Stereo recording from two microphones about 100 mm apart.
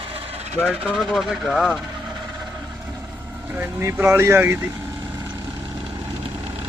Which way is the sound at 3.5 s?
20° right (ahead or behind).